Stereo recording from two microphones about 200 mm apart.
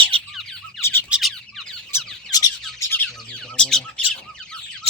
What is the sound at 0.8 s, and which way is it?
Squawk, 10° left (ahead or behind).